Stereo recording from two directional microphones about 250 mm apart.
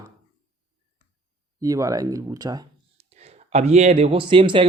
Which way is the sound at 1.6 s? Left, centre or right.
Centre.